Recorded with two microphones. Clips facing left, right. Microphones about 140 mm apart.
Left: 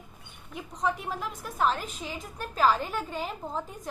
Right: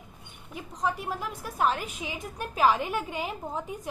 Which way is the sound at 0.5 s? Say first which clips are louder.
Even; centre (ahead or behind).